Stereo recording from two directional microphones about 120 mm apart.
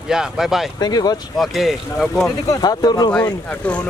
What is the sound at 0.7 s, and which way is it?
Speech, 35° left (ahead or behind).